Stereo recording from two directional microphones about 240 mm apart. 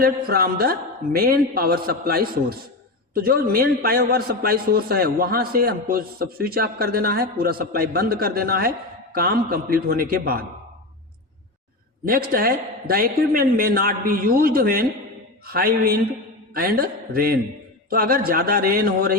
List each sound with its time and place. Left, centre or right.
0.0 s a man's voice: right
12.0 s a man's voice: right